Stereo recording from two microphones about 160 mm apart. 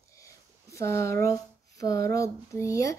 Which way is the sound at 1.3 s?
20° left (ahead or behind).